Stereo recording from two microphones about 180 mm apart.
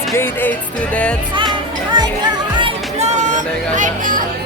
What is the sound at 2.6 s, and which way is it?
Music, 40° right (ahead or behind).